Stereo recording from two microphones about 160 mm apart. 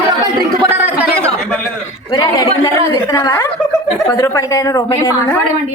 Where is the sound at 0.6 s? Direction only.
15° right (ahead or behind).